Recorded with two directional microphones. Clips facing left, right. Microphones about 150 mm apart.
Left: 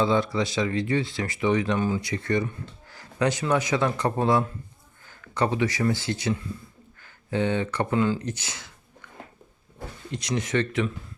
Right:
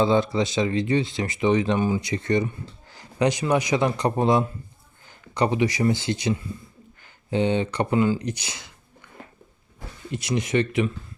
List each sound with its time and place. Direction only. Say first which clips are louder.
0.0 s speech: right 3 dB; 25° right (ahead or behind)
2.9 s a sound: right 2 dB; 15° right (ahead or behind)
3.4 s speech: right 2 dB; 15° right (ahead or behind)
10.1 s speech: right 3 dB; 10° right (ahead or behind)